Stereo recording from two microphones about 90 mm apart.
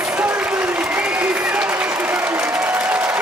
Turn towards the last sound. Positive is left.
turn(degrees=-15)  # may be behind; listen again after turning